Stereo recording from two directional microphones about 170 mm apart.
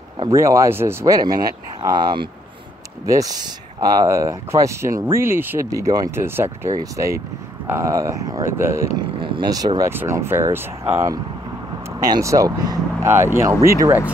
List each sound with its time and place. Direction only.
0.3 s speech: 20° right (ahead or behind)
8.9 s speech: 30° right (ahead or behind); by 14.1 s 15° right (ahead or behind)